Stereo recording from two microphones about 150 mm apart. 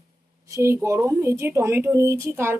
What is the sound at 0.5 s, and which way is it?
Speech, 20° right (ahead or behind).